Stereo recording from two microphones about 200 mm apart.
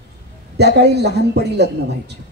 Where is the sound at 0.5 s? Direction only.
55° right (ahead or behind).